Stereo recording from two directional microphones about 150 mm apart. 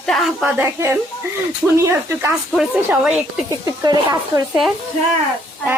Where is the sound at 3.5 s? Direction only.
25° right (ahead or behind).